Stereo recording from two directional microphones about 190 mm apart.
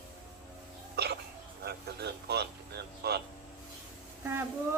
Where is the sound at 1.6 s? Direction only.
60° right (ahead or behind).